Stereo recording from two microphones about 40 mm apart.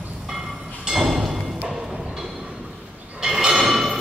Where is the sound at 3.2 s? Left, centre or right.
Centre.